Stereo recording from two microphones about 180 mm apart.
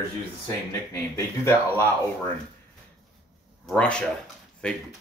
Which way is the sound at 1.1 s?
15° left (ahead or behind).